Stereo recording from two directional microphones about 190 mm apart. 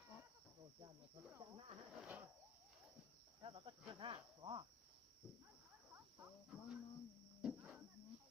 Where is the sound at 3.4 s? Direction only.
30° right (ahead or behind).